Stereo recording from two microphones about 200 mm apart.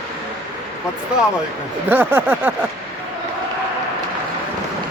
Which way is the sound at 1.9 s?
10° right (ahead or behind).